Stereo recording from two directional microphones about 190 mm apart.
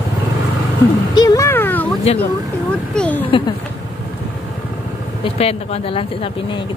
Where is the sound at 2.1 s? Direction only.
35° left (ahead or behind).